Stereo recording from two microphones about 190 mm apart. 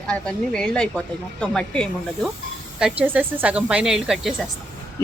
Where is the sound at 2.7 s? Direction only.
5° right (ahead or behind).